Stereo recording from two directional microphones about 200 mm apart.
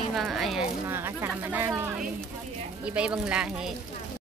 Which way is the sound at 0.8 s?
15° right (ahead or behind).